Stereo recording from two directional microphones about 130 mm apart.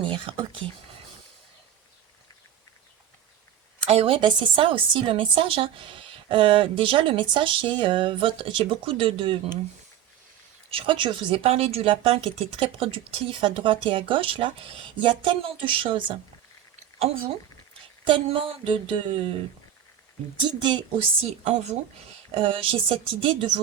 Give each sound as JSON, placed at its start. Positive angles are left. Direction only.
{"t": 0.0, "sound": "whispering", "side_deg": -40}
{"t": 3.8, "sound": "a woman's voice", "side_deg": -50}
{"t": 10.7, "sound": "speech", "side_deg": -45}
{"t": 18.0, "sound": "a woman's voice", "side_deg": -45}
{"t": 20.4, "sound": "a woman's voice", "side_deg": -40}
{"t": 21.4, "sound": "speech", "side_deg": -55}
{"t": 22.4, "sound": "speech", "side_deg": -45}